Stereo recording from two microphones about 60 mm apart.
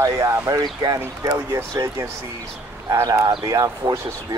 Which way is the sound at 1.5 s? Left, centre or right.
Right.